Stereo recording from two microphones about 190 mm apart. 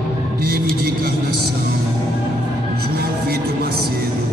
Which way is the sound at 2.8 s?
55° right (ahead or behind).